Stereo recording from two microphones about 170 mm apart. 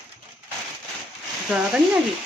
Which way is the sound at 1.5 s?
5° right (ahead or behind).